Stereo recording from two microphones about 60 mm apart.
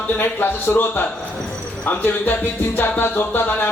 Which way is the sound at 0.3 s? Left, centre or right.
Left.